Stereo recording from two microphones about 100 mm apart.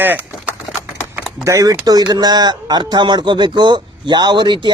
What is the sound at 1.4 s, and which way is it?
Speech, 35° right (ahead or behind).